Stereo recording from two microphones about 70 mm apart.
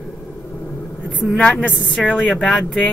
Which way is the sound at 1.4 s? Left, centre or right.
Centre.